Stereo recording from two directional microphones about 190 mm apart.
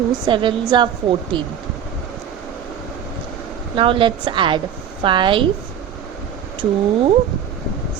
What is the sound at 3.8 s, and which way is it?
Speech, 25° right (ahead or behind).